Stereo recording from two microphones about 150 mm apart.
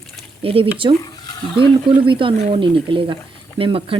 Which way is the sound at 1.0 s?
25° left (ahead or behind).